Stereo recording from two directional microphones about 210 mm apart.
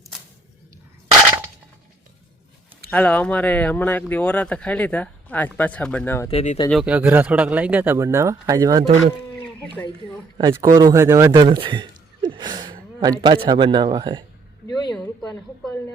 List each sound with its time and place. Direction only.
2.9 s speech: 5° left (ahead or behind)
6.3 s speech: 35° left (ahead or behind)
6.7 s speech: 5° right (ahead or behind)
10.3 s a man's voice: 20° right (ahead or behind)